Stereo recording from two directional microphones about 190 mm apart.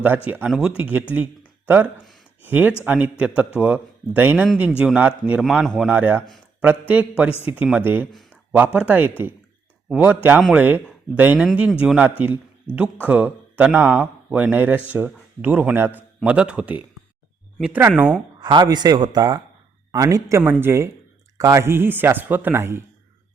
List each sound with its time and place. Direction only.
0.3 s speech: 5° right (ahead or behind)
1.1 s a sound: 10° right (ahead or behind)
2.4 s a man's voice: 10° right (ahead or behind)
18.3 s speech: 25° right (ahead or behind)